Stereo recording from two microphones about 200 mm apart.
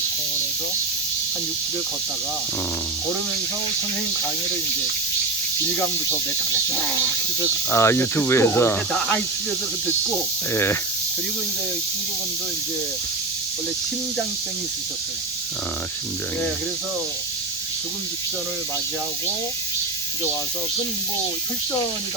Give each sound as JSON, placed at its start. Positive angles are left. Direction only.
{"t": 7.7, "sound": "speech", "side_deg": 15}
{"t": 10.5, "sound": "speech", "side_deg": 15}